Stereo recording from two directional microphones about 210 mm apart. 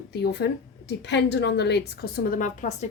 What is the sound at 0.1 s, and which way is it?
Speech, 50° left (ahead or behind).